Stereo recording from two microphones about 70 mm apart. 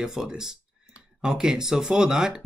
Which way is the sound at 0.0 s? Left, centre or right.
Centre.